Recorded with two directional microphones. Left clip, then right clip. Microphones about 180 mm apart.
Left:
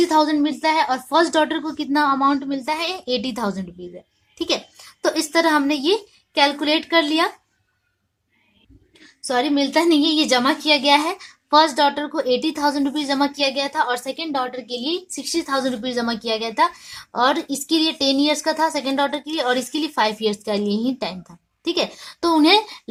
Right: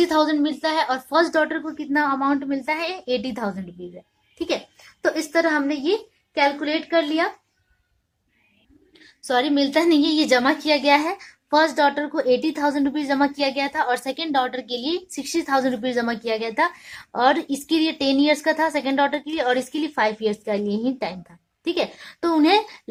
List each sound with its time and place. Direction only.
0.0 s a woman's voice: 25° left (ahead or behind)
9.2 s a woman's voice: 20° left (ahead or behind)